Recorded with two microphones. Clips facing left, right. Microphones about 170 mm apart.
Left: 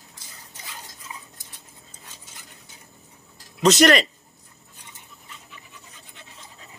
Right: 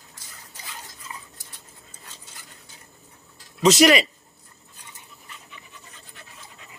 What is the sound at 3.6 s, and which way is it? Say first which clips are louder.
Speech: even; centre (ahead or behind).